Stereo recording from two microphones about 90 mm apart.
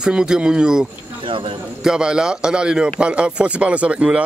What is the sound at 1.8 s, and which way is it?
Speech, 10° right (ahead or behind).